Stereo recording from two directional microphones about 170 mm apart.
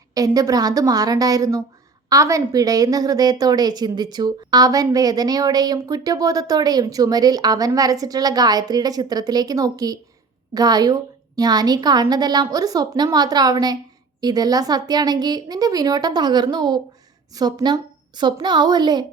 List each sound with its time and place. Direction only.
0.1 s a woman's voice: 20° right (ahead or behind)